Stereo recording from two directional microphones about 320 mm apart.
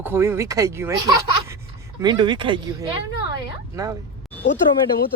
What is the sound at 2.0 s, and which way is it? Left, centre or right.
Speech, centre.